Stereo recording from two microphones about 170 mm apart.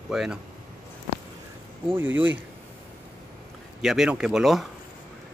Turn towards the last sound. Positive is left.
turn(degrees=0)  # may be behind; listen again after turning